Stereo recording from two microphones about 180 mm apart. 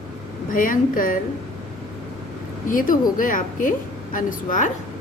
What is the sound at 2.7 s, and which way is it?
A woman's voice, 50° left (ahead or behind).